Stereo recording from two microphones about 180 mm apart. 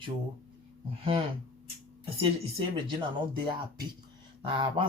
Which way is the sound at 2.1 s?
30° right (ahead or behind).